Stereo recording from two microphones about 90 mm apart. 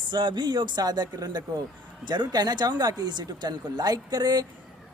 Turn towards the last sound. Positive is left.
turn(degrees=-50)  # may be behind; listen again after turning